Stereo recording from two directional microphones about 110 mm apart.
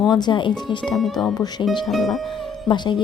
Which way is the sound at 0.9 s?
Centre (ahead or behind).